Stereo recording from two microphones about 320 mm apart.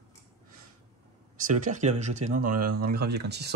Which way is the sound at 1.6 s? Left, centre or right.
Right.